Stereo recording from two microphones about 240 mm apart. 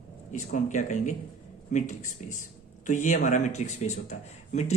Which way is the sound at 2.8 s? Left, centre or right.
Left.